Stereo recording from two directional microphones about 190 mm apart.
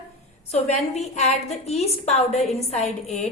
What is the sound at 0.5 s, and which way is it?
A woman's voice, 35° left (ahead or behind).